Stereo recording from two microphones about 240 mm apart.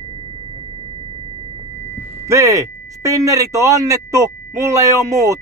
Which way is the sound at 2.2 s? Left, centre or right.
Centre.